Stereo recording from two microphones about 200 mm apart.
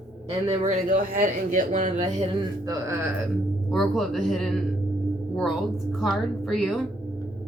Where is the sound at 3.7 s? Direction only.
Centre (ahead or behind).